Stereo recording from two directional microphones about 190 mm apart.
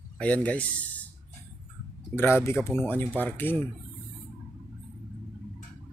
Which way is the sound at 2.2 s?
10° left (ahead or behind).